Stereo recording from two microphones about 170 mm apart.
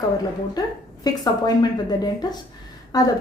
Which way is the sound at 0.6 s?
20° left (ahead or behind).